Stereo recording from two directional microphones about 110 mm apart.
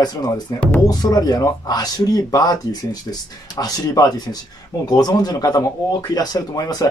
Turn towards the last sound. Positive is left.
turn(degrees=35)  # may be behind; listen again after turning